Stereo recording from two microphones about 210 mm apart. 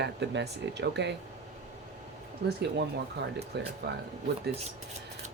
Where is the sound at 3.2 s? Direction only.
55° right (ahead or behind).